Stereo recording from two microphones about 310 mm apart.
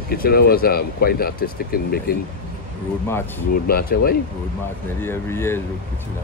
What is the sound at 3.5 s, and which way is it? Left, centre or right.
Speech, left.